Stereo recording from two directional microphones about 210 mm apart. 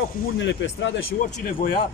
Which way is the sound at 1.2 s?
40° left (ahead or behind).